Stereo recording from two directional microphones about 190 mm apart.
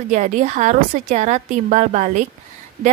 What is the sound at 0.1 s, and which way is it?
Speech, 40° right (ahead or behind).